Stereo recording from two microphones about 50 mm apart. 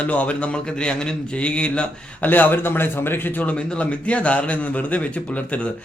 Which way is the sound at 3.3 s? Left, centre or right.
Left.